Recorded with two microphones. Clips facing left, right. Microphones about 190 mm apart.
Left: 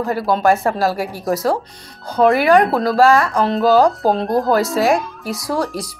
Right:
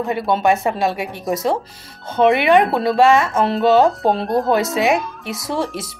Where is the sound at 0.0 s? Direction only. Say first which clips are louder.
Left 1 dB; centre (ahead or behind).